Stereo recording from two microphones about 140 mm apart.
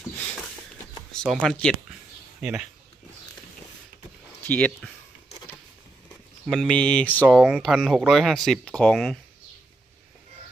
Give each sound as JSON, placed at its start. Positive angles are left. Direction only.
{"t": 1.2, "sound": "speech", "side_deg": 0}
{"t": 4.4, "sound": "speech", "side_deg": 10}
{"t": 6.5, "sound": "speech", "side_deg": 5}
{"t": 7.3, "sound": "speech", "side_deg": -5}